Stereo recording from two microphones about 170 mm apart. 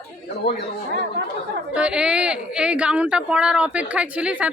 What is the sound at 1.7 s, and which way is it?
Speech, 5° right (ahead or behind).